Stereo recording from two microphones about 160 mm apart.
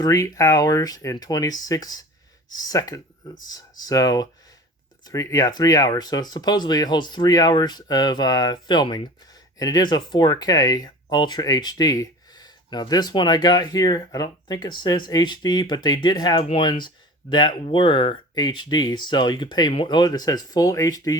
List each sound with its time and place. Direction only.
0.0 s speech: 20° left (ahead or behind)